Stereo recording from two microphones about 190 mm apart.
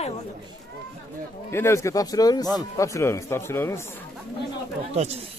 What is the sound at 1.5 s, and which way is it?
Speech, 15° left (ahead or behind).